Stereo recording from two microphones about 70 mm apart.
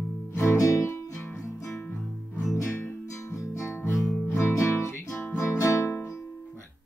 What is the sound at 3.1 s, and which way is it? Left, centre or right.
Music, left.